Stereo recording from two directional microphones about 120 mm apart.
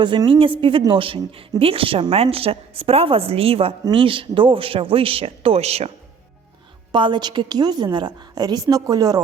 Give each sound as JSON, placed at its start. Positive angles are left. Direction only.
{"t": 0.0, "sound": "a woman's voice", "side_deg": -40}
{"t": 6.9, "sound": "a woman's voice", "side_deg": -40}